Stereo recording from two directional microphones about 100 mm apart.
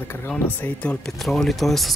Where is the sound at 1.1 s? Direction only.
Centre (ahead or behind).